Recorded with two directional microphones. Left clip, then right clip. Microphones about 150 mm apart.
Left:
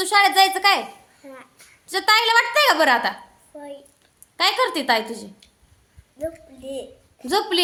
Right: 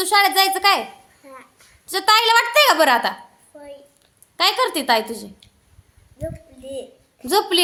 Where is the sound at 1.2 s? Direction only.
20° left (ahead or behind).